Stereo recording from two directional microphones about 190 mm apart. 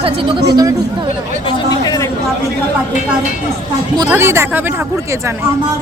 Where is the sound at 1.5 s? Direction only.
20° left (ahead or behind).